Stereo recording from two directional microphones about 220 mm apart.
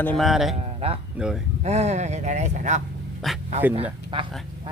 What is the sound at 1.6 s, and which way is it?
Speech, 30° right (ahead or behind).